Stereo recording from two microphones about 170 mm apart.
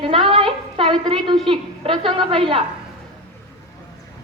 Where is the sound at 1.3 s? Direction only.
30° right (ahead or behind).